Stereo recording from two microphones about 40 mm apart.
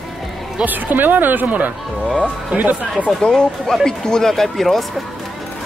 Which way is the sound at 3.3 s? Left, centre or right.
Centre.